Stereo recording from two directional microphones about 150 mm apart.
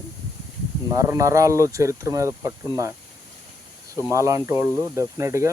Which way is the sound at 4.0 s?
20° right (ahead or behind).